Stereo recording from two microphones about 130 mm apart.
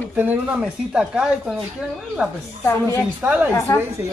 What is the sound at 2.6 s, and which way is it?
Speech, 20° left (ahead or behind).